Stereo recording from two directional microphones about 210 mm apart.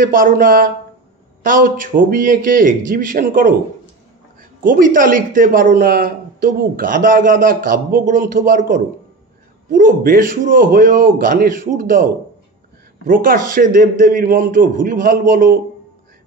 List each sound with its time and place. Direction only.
0.0 s speech: 40° right (ahead or behind)
4.6 s speech: 40° right (ahead or behind)